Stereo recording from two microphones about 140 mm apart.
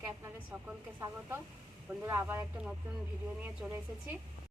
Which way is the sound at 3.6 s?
20° right (ahead or behind).